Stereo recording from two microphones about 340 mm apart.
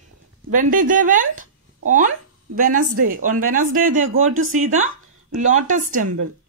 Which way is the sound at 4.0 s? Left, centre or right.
Right.